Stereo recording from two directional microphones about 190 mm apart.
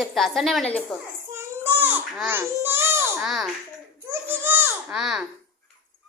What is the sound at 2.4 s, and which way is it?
Baby cry, 15° right (ahead or behind).